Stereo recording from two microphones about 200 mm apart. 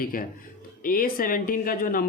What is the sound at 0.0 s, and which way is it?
Speech, 45° left (ahead or behind).